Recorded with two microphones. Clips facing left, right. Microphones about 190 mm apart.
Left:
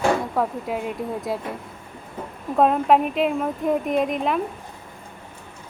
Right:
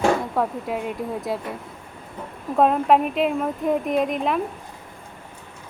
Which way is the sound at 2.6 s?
Centre (ahead or behind).